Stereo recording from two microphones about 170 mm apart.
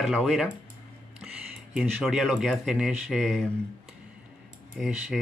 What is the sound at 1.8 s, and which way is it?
Speech, centre (ahead or behind).